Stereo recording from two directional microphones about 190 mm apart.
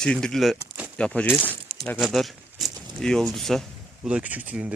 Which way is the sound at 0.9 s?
5° left (ahead or behind).